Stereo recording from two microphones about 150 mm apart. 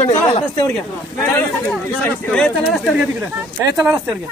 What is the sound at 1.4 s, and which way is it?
Speech, 10° left (ahead or behind).